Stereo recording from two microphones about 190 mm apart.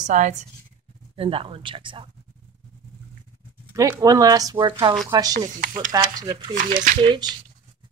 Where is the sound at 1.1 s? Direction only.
30° right (ahead or behind).